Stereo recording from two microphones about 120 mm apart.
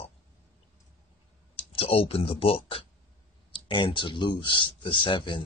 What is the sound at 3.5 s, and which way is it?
Speech, 40° left (ahead or behind).